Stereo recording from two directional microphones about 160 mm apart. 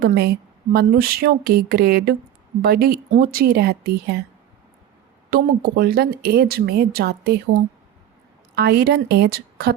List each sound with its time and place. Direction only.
0.0 s speech: 80° right
5.3 s speech: 70° right (ahead or behind); by 7.4 s 90° right
8.5 s a woman's voice: 90° right